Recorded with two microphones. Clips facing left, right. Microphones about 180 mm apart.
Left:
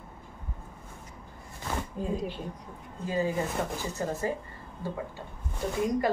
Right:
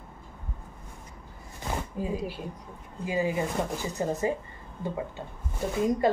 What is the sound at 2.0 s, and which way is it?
A woman's voice, 5° right (ahead or behind).